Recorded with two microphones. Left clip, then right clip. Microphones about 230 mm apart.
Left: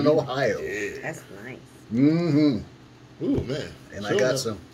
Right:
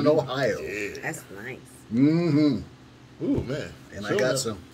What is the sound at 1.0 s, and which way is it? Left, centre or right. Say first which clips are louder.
Speech: right 1 dB; right.